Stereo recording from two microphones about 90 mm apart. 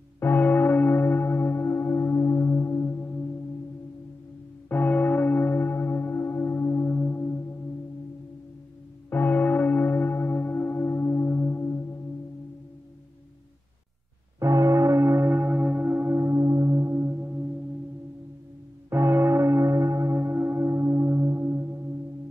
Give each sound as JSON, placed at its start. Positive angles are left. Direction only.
{"t": 0.2, "sound": "church bell", "side_deg": 20}
{"t": 4.6, "sound": "church bell", "side_deg": 20}
{"t": 7.2, "sound": "singing bowl", "side_deg": 30}
{"t": 9.1, "sound": "church bell", "side_deg": 20}
{"t": 14.4, "sound": "church bell", "side_deg": -35}
{"t": 18.9, "sound": "church bell", "side_deg": -25}